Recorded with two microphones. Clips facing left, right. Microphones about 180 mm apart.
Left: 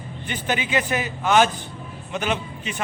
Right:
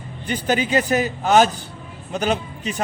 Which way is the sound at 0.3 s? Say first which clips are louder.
Right 5 dB; 40° right (ahead or behind).